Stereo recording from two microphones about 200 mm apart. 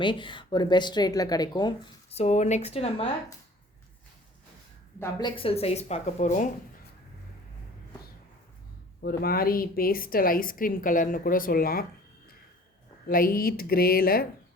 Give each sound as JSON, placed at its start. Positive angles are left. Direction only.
{"t": 0.0, "sound": "a woman's voice", "side_deg": 25}
{"t": 5.2, "sound": "speech", "side_deg": 25}
{"t": 9.0, "sound": "a woman's voice", "side_deg": 50}
{"t": 13.1, "sound": "a woman's voice", "side_deg": 45}